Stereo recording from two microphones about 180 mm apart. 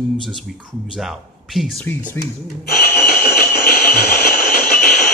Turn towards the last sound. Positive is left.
turn(degrees=55)  # may be behind; listen again after turning